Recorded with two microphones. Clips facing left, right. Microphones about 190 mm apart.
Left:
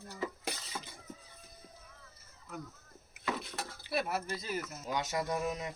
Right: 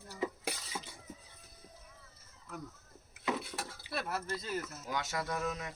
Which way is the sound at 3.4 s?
10° right (ahead or behind).